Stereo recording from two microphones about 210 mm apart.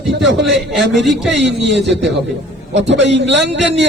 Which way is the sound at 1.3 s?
55° right (ahead or behind).